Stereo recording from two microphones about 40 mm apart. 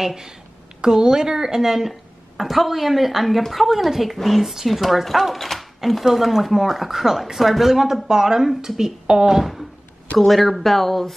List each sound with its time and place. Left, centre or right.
0.0 s a woman's voice: centre
9.4 s a woman's voice: centre